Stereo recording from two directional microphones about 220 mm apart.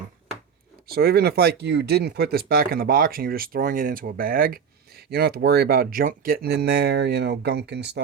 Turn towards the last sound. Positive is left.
turn(degrees=-50)  # may be behind; listen again after turning